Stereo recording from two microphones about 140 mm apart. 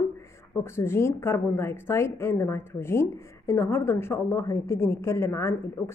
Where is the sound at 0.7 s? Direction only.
20° left (ahead or behind).